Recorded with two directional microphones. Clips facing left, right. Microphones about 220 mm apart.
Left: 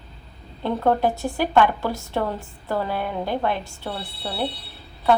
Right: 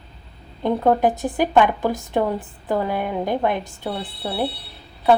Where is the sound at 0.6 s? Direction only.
15° right (ahead or behind).